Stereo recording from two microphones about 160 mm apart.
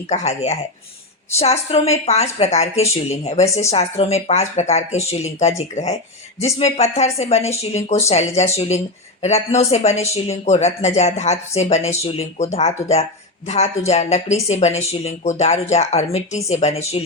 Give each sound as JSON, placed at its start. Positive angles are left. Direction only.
{"t": 0.1, "sound": "a woman's voice", "side_deg": 45}